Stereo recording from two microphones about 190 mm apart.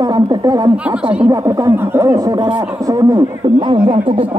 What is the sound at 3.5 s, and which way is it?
Speech, 25° right (ahead or behind).